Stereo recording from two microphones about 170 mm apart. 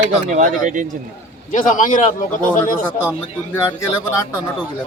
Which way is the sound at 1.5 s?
50° left (ahead or behind).